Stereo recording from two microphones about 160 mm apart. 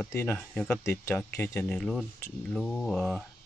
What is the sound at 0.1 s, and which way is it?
Speech, 15° left (ahead or behind).